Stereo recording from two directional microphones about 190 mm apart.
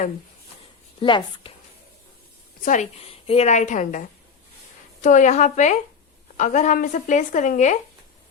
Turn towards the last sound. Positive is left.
turn(degrees=40)  # may be behind; listen again after turning